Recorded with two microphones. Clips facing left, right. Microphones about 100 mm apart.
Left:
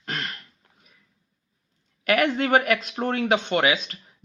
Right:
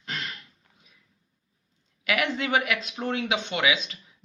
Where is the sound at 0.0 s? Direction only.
55° left (ahead or behind).